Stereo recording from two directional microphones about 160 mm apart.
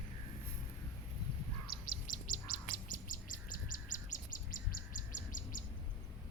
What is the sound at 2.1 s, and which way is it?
Bird, 60° left (ahead or behind).